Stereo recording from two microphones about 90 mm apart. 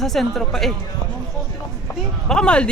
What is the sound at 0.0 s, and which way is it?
Speech, 5° left (ahead or behind).